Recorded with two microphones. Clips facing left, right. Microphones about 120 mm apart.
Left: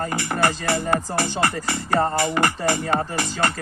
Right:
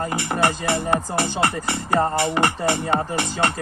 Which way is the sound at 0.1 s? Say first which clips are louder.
Right 1 dB; 15° right (ahead or behind).